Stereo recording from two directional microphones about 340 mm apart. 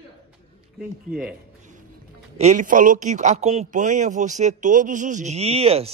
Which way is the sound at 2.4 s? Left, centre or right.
Right.